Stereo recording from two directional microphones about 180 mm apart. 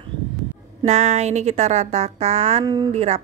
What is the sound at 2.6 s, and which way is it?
Speech, 20° right (ahead or behind).